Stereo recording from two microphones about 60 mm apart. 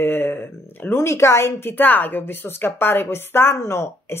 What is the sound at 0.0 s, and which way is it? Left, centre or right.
Speech, left.